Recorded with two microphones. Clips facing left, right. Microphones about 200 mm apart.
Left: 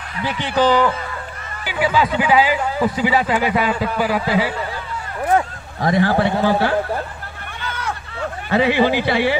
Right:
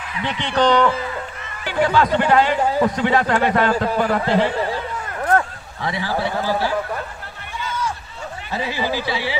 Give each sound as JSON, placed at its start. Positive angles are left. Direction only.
{"t": 0.2, "sound": "a man's voice", "side_deg": 5}
{"t": 5.8, "sound": "a man's voice", "side_deg": 50}
{"t": 7.6, "sound": "a sound", "side_deg": 60}